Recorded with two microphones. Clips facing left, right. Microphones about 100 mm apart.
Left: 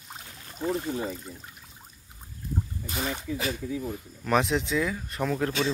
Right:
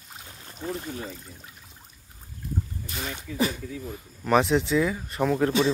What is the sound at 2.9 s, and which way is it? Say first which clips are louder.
Speech: left 6 dB; 10° left (ahead or behind).